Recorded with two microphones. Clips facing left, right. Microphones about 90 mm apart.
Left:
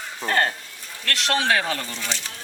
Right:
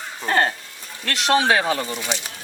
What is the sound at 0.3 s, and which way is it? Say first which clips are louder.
Chicken: right 2 dB; 20° right (ahead or behind).